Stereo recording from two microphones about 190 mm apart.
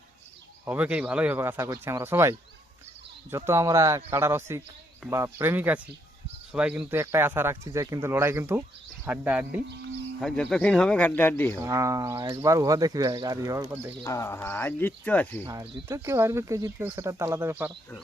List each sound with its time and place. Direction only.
0.6 s speech: 10° right (ahead or behind)
3.3 s speech: 15° right (ahead or behind)
10.2 s speech: 5° left (ahead or behind)
11.6 s speech: 15° right (ahead or behind)
14.0 s speech: 15° left (ahead or behind)
15.9 s speech: 15° right (ahead or behind)